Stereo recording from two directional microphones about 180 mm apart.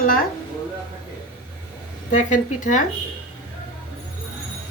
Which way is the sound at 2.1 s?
45° left (ahead or behind).